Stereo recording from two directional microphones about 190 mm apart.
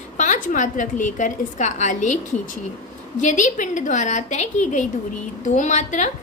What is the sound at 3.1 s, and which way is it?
A woman's voice, 40° left (ahead or behind).